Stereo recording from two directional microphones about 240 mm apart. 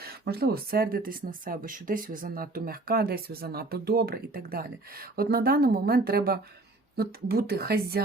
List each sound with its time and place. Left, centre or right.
0.0 s speech: right